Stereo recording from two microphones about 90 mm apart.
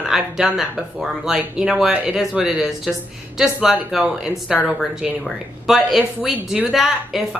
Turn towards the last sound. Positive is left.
turn(degrees=0)  # may be behind; listen again after turning